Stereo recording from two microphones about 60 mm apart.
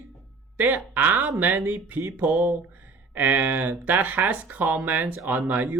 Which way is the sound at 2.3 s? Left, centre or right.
Centre.